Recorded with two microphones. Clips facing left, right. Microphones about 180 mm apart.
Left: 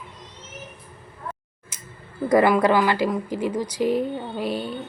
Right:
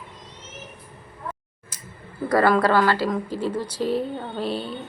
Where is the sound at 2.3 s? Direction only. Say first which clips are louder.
Left 2 dB; 15° left (ahead or behind).